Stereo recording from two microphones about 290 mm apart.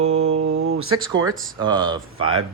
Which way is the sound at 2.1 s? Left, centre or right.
Right.